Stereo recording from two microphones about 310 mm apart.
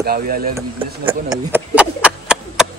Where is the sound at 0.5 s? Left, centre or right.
Centre.